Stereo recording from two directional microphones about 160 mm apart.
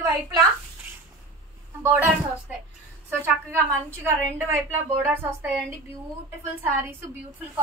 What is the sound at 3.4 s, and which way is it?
A woman's voice, 10° right (ahead or behind).